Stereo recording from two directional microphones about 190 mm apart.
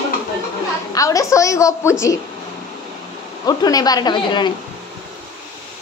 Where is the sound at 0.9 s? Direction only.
15° left (ahead or behind).